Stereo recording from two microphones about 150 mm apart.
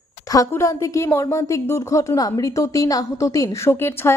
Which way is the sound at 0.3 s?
20° left (ahead or behind).